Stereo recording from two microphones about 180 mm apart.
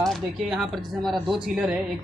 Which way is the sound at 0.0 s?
Centre (ahead or behind).